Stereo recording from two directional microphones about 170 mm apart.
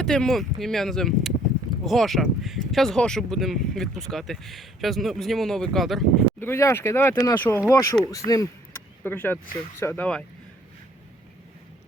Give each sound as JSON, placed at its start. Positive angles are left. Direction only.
{"t": 0.0, "sound": "speech", "side_deg": 5}
{"t": 6.4, "sound": "speech", "side_deg": 15}